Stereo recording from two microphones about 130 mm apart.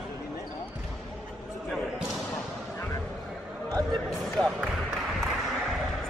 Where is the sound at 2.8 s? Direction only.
20° left (ahead or behind).